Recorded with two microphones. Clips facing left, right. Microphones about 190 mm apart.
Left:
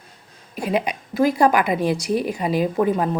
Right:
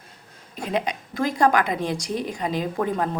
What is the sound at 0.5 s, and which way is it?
A woman's voice, 10° left (ahead or behind).